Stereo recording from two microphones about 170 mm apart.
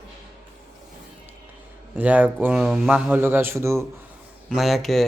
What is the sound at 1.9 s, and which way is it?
A man's voice, 10° right (ahead or behind).